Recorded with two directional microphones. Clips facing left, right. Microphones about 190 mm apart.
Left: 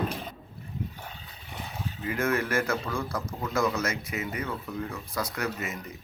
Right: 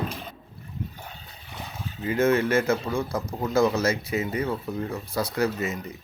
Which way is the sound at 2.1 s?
25° right (ahead or behind).